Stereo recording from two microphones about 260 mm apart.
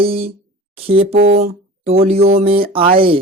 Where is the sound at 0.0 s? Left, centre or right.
Right.